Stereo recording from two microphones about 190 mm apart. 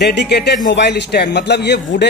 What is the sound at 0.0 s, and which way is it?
A man's voice, 60° left (ahead or behind).